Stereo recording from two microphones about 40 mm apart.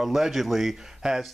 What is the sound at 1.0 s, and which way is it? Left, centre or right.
Speech, centre.